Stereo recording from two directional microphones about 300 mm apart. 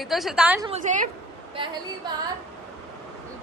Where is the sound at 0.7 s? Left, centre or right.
Right.